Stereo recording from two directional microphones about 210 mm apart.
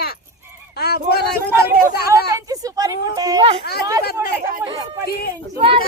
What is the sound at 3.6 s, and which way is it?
Speech, 50° left (ahead or behind).